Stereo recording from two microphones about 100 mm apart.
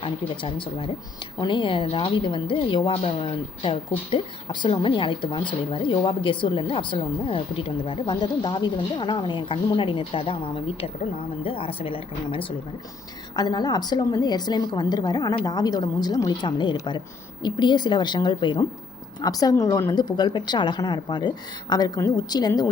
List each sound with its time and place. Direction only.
0.0 s a woman's voice: 60° left (ahead or behind)
13.3 s a woman's voice: 40° left (ahead or behind)
16.5 s a woman's voice: 50° left (ahead or behind)
19.2 s a woman's voice: 40° left (ahead or behind)